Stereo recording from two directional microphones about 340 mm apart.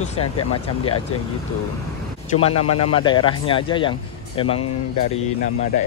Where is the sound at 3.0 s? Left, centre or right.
Centre.